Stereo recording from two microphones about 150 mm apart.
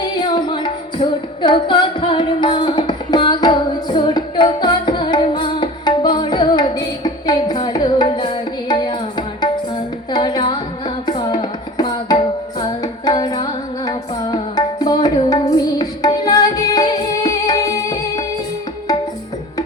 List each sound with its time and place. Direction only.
0.2 s music: 30° left (ahead or behind)